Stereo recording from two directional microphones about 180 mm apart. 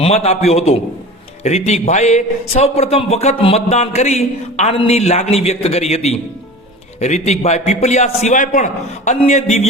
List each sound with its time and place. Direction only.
0.0 s a man's voice: 35° left (ahead or behind)